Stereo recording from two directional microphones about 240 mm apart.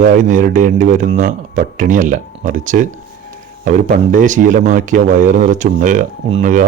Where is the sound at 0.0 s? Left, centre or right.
Right.